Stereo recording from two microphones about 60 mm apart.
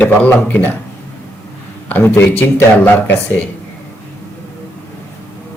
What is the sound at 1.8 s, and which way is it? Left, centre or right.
A man's voice, left.